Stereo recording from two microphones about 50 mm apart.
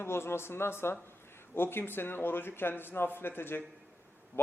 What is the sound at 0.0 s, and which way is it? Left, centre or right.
A man's voice, left.